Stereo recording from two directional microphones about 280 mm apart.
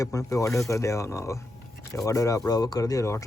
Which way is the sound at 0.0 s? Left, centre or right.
Centre.